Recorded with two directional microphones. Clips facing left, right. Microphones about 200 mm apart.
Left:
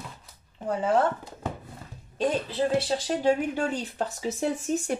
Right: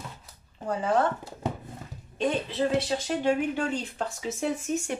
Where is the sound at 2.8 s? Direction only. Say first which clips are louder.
Left 1 dB; 35° left (ahead or behind).